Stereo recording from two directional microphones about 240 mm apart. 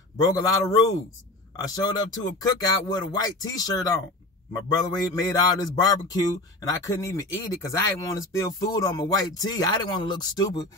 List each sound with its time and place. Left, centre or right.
0.2 s a man's voice: centre